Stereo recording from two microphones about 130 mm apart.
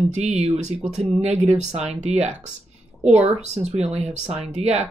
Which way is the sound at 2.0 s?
60° right (ahead or behind).